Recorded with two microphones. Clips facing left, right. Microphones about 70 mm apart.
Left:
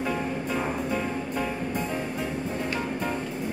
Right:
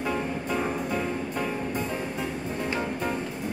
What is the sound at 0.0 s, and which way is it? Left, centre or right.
Music, centre.